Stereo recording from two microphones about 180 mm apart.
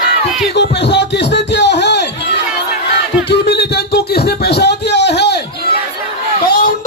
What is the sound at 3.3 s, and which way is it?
Beatboxing, 65° left (ahead or behind).